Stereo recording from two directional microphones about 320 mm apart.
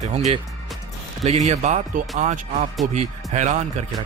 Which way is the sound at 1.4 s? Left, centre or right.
Right.